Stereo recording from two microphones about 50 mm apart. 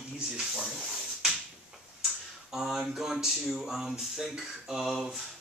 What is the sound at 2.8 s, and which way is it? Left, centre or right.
Speech, centre.